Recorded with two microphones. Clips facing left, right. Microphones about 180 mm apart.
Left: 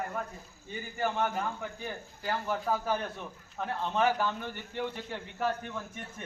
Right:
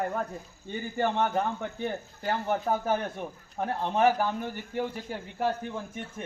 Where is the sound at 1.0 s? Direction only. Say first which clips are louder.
Right 3 dB; 60° right (ahead or behind).